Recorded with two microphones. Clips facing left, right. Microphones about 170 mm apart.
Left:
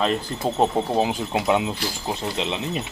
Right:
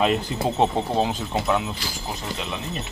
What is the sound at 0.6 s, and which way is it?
Speech, 5° left (ahead or behind).